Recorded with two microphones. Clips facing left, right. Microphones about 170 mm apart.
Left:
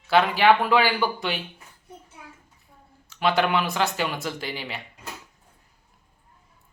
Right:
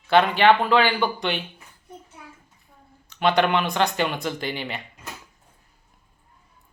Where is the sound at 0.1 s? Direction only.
5° left (ahead or behind).